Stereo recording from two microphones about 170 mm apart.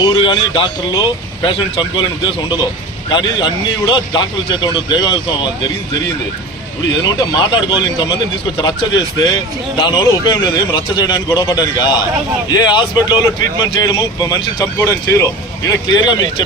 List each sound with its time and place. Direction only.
0.0 s speech: 25° left (ahead or behind)
7.0 s speech: 25° left (ahead or behind)